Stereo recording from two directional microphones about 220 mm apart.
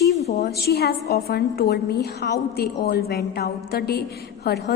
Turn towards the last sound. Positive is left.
turn(degrees=45)  # may be behind; listen again after turning